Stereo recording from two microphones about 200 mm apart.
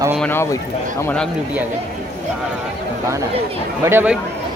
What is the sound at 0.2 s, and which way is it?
A man's voice, 10° left (ahead or behind).